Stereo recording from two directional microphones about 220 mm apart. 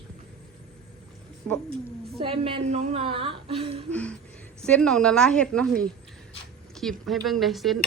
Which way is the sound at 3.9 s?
5° left (ahead or behind).